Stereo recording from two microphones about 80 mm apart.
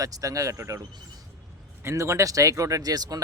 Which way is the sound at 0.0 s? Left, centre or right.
Right.